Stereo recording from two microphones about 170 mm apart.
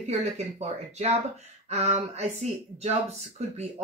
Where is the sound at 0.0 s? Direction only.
40° right (ahead or behind).